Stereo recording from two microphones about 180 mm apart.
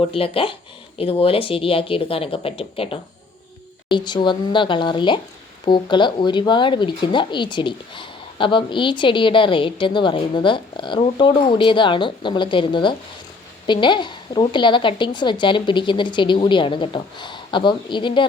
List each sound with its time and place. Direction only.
0.1 s speech: 30° left (ahead or behind)